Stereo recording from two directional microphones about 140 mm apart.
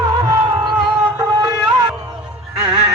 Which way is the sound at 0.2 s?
30° right (ahead or behind).